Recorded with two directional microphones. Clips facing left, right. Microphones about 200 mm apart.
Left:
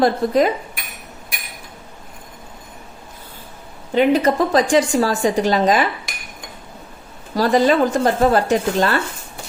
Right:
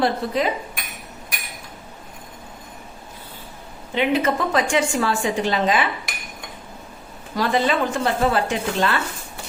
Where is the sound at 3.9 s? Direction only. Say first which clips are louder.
Left 5 dB; 40° left (ahead or behind).